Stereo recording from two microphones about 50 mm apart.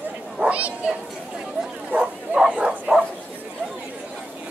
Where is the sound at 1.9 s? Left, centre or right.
Right.